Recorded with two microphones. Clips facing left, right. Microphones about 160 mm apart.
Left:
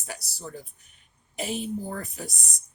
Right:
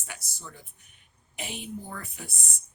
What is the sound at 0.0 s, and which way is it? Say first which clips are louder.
Speech: left 6 dB; 35° left (ahead or behind).